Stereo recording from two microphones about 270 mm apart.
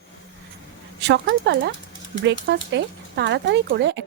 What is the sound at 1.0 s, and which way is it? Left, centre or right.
Speech, right.